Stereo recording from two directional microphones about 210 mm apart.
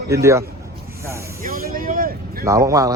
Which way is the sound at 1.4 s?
40° right (ahead or behind).